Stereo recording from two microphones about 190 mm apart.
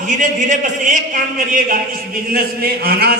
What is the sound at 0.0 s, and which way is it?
A man's voice, 40° right (ahead or behind).